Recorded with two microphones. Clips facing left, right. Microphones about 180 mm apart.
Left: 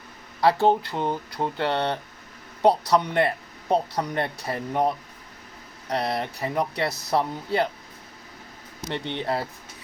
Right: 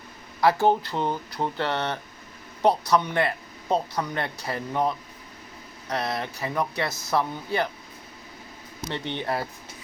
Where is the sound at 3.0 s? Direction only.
25° left (ahead or behind).